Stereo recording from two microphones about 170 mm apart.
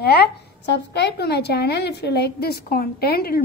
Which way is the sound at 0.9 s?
80° left.